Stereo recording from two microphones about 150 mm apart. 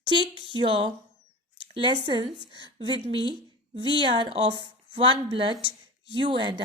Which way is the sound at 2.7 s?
35° right (ahead or behind).